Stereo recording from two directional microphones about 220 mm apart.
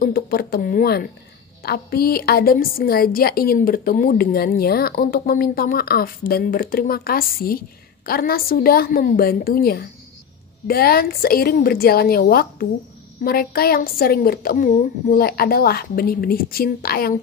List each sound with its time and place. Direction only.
0.0 s a woman's voice: 40° left (ahead or behind)